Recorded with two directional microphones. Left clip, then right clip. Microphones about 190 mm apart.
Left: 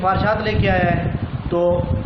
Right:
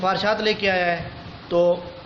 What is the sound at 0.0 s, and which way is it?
Speech, 45° right (ahead or behind).